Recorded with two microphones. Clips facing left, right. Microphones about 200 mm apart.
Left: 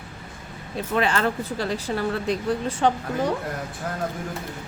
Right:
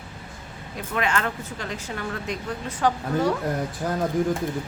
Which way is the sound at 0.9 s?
35° left (ahead or behind).